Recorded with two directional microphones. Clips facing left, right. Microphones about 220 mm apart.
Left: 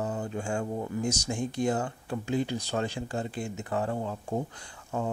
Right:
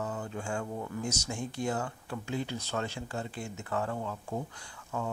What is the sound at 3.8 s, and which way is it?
Mantra, 25° left (ahead or behind).